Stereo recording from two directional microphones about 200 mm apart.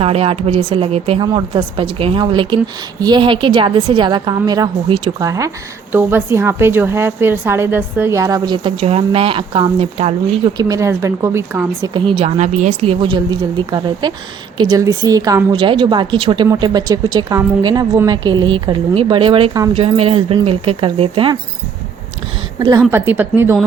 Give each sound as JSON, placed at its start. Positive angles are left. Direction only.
{"t": 0.0, "sound": "a woman's voice", "side_deg": -30}
{"t": 11.9, "sound": "a woman's voice", "side_deg": -25}
{"t": 22.9, "sound": "a woman's voice", "side_deg": -10}